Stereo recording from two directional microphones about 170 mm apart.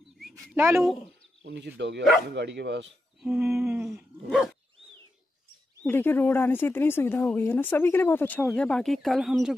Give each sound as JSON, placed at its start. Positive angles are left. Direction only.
{"t": 0.6, "sound": "speech", "side_deg": -15}
{"t": 1.4, "sound": "speech", "side_deg": -90}
{"t": 3.2, "sound": "humming", "side_deg": -5}
{"t": 3.9, "sound": "dog", "side_deg": 0}
{"t": 5.8, "sound": "speech", "side_deg": 10}